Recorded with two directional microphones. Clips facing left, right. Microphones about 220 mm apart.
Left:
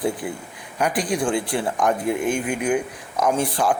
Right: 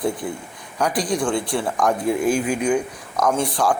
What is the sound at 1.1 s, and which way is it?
Speech, 5° left (ahead or behind).